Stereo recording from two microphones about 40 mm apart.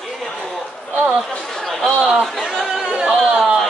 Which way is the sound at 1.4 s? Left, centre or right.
Centre.